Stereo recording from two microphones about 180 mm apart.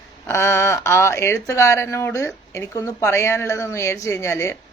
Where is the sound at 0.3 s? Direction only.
15° left (ahead or behind).